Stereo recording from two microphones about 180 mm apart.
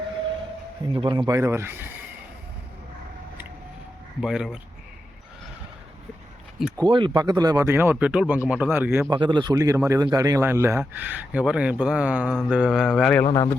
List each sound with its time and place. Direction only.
0.9 s speech: 25° right (ahead or behind)
1.4 s a man's voice: 15° right (ahead or behind)
4.2 s speech: 5° right (ahead or behind)
6.7 s a man's voice: 25° right (ahead or behind)
9.0 s a man's voice: 25° right (ahead or behind); by 13.2 s centre (ahead or behind)
13.2 s speech: 20° left (ahead or behind)